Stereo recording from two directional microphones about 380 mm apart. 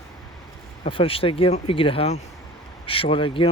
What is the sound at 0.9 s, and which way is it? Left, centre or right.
Speech, centre.